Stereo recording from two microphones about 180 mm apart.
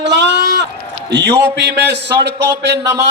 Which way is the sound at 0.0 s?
75° right (ahead or behind).